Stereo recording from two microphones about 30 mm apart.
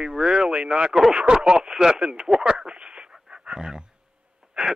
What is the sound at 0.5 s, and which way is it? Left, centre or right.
Speech, right.